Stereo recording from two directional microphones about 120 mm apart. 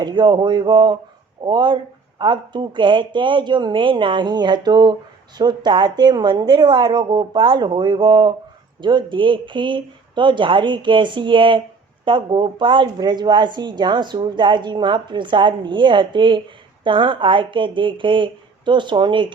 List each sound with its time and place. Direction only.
0.0 s speech: 40° right (ahead or behind)